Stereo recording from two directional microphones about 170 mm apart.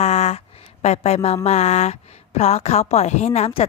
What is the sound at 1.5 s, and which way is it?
A woman's voice, 40° left (ahead or behind).